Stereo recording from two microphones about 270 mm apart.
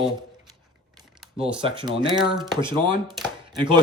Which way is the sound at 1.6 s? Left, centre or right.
Centre.